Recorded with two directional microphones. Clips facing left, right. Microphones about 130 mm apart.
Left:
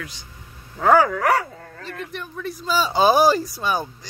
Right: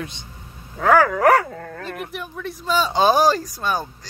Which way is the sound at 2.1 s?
5° right (ahead or behind).